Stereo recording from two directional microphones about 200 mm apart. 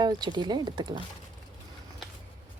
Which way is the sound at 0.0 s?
20° right (ahead or behind).